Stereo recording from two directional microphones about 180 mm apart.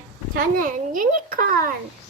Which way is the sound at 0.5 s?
50° right (ahead or behind).